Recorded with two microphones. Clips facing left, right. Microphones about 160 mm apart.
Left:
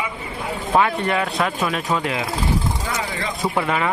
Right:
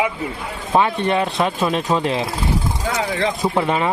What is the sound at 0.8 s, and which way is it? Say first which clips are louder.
Speech: right 3 dB; 20° right (ahead or behind).